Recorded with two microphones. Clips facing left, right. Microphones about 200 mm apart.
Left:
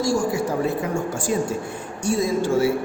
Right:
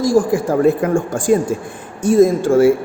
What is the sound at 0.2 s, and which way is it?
A woman's voice, 55° right (ahead or behind).